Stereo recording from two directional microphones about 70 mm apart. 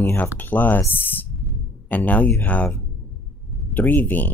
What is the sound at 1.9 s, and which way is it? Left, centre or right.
Speech, left.